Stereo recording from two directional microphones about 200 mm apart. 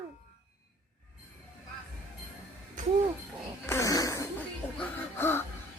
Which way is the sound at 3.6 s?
15° left (ahead or behind).